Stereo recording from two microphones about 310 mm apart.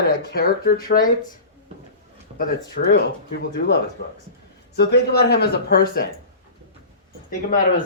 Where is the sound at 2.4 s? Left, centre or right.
Left.